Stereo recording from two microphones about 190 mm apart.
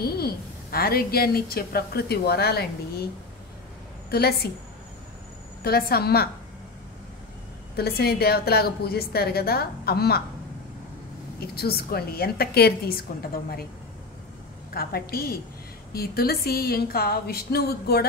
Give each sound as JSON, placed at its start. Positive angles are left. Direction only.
{"t": 0.0, "sound": "a woman's voice", "side_deg": 55}
{"t": 4.1, "sound": "a woman's voice", "side_deg": 55}
{"t": 5.6, "sound": "a woman's voice", "side_deg": 55}
{"t": 7.7, "sound": "a woman's voice", "side_deg": 55}
{"t": 11.3, "sound": "a woman's voice", "side_deg": 55}
{"t": 14.7, "sound": "a woman's voice", "side_deg": 55}